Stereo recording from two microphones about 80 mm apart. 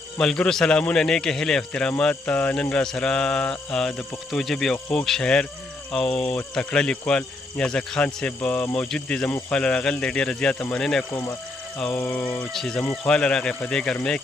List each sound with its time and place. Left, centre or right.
0.2 s a man's voice: centre
11.9 s a man's voice: centre